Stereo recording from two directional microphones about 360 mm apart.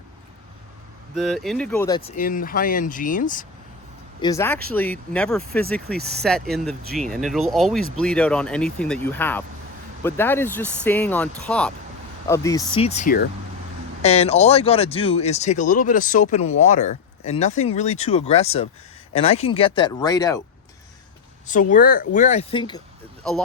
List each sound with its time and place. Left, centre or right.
1.1 s speech: centre; by 3.4 s left
4.2 s speech: centre
21.7 s speech: left